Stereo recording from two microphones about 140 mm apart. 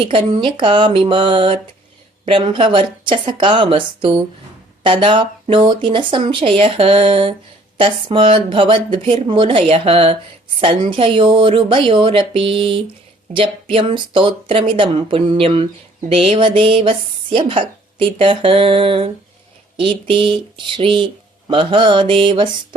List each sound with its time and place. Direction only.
0.0 s a woman's voice: 40° right (ahead or behind)